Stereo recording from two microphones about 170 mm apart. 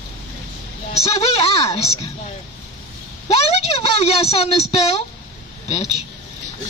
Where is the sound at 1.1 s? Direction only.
35° left (ahead or behind).